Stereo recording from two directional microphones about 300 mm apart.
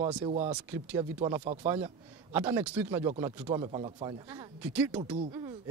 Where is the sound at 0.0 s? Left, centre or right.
Centre.